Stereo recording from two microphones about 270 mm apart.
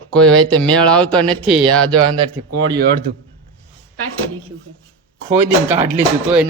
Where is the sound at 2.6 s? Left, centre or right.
Right.